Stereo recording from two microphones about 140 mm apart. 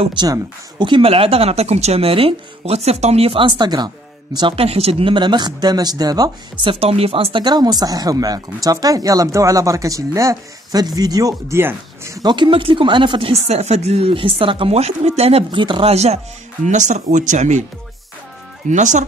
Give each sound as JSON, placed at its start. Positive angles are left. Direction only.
{"t": 0.0, "sound": "speech", "side_deg": -35}
{"t": 6.6, "sound": "speech", "side_deg": -40}
{"t": 16.6, "sound": "speech", "side_deg": -60}
{"t": 18.7, "sound": "speech", "side_deg": -60}